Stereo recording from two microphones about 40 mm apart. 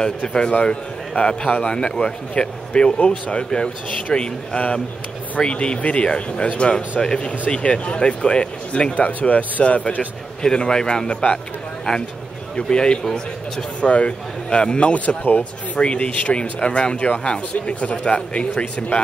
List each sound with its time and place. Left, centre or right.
0.0 s a man's voice: left
6.4 s a man's voice: left
8.9 s a man's voice: left
10.4 s a man's voice: centre
11.9 s speech: centre
12.5 s a man's voice: left
13.7 s a man's voice: left